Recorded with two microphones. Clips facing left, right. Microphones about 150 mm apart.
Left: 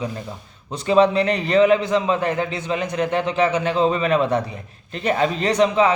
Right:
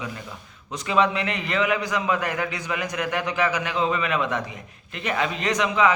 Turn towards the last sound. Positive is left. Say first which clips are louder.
# left 4 dB
turn(degrees=30)  # may be behind; listen again after turning